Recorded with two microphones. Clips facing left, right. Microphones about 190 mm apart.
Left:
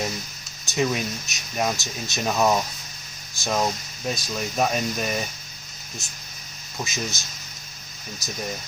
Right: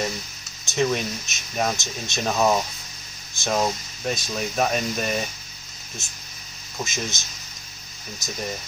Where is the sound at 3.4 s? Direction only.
Centre (ahead or behind).